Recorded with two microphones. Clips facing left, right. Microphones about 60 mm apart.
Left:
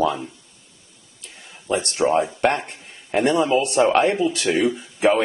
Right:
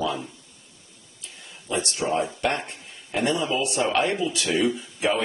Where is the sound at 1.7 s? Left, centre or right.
Left.